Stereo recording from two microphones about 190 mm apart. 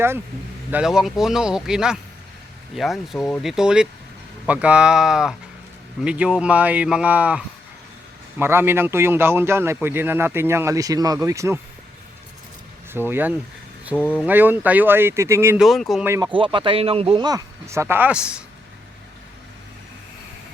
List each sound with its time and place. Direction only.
0.7 s a man's voice: 5° right (ahead or behind)
12.9 s a man's voice: 10° right (ahead or behind)
13.9 s speech: 10° left (ahead or behind)
14.3 s a man's voice: 10° right (ahead or behind)
15.6 s speech: centre (ahead or behind)
16.0 s a man's voice: 15° right (ahead or behind)
16.3 s speech: 25° right (ahead or behind); by 18.4 s 5° right (ahead or behind)